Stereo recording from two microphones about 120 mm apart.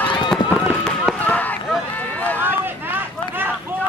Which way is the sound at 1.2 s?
15° left (ahead or behind).